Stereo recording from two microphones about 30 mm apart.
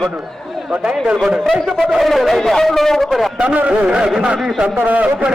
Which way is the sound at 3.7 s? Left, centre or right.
Right.